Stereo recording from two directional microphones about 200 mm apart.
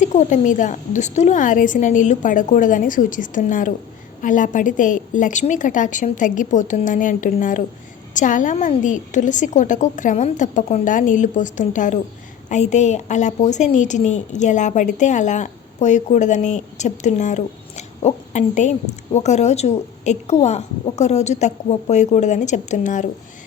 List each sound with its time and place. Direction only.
0.0 s a woman's voice: 35° left (ahead or behind)